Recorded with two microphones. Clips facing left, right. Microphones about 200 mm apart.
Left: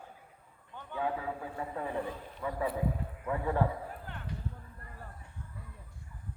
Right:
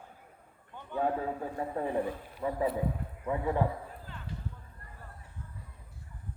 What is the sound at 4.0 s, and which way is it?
Clip-clop, 65° left (ahead or behind).